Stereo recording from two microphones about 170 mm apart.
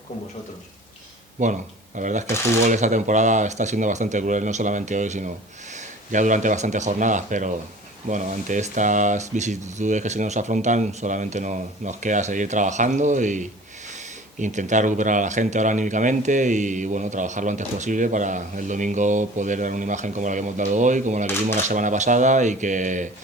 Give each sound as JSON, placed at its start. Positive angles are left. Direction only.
{"t": 1.4, "sound": "speech", "side_deg": -45}